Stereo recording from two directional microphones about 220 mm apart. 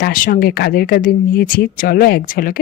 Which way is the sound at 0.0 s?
40° left (ahead or behind).